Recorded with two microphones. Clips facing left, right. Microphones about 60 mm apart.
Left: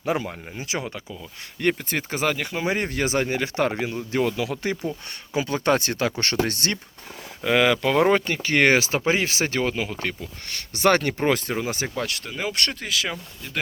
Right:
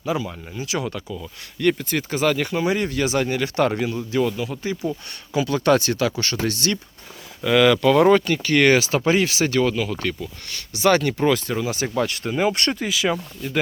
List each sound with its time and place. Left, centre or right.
0.0 s speech: left
2.3 s speech: centre
2.6 s speech: left; by 4.0 s centre
4.1 s speech: left
5.3 s speech: left
7.4 s speech: left
10.5 s speech: left
12.2 s speech: centre
12.8 s speech: centre